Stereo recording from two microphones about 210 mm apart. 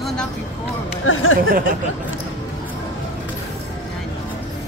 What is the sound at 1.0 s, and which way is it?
Speech, 75° left (ahead or behind).